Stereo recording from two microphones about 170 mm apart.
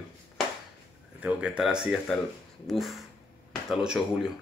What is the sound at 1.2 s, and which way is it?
Speech, 5° right (ahead or behind).